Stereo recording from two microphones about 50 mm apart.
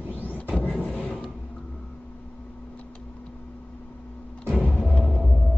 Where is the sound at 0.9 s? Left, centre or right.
Left.